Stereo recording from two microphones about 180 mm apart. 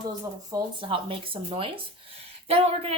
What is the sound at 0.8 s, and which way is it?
Speech, 30° right (ahead or behind).